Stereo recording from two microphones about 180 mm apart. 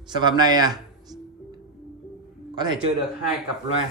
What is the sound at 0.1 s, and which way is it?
Speech, 25° right (ahead or behind).